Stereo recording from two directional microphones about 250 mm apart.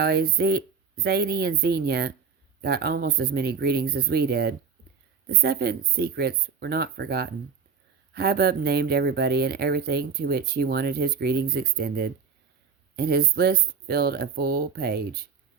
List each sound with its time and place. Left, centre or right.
0.0 s speech: right